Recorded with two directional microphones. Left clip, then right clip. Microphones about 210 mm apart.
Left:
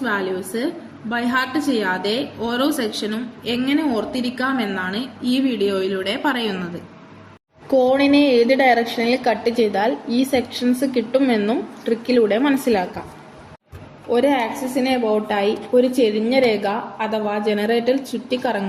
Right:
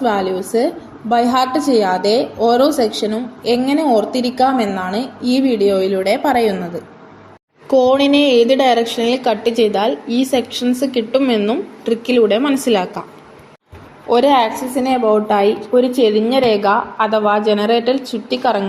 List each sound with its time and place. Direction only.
0.0 s a woman's voice: 15° right (ahead or behind)
7.7 s a woman's voice: 15° right (ahead or behind)
14.1 s a woman's voice: 15° right (ahead or behind)